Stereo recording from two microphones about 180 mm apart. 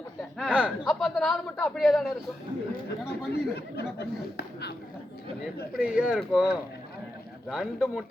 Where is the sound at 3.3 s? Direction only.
65° left (ahead or behind).